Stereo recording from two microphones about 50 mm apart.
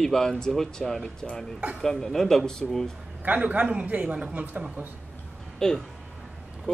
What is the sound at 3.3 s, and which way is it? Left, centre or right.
Speech, right.